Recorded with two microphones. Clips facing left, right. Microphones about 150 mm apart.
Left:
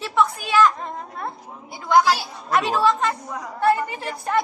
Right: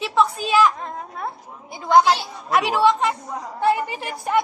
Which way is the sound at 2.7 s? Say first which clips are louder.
Right 2 dB; 15° right (ahead or behind).